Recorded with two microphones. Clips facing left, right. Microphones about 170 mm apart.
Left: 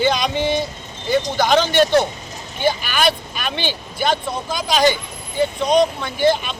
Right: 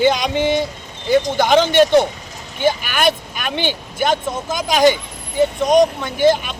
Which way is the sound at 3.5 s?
15° right (ahead or behind).